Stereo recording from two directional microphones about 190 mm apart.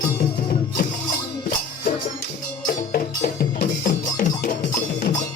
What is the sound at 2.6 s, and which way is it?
Music, 50° left (ahead or behind).